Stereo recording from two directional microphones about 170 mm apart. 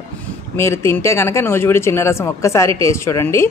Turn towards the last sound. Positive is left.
turn(degrees=15)  # may be behind; listen again after turning